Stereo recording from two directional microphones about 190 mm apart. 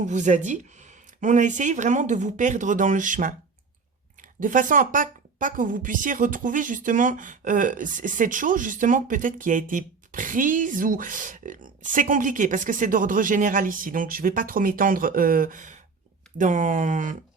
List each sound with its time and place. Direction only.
0.0 s a woman's voice: 40° right (ahead or behind)